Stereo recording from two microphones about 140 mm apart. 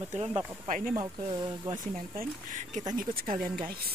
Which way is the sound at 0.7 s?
65° right (ahead or behind).